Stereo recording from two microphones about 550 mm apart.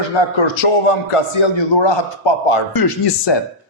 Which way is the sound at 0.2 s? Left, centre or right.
Left.